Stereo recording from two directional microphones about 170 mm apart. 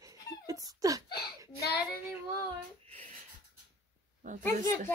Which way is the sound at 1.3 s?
20° right (ahead or behind).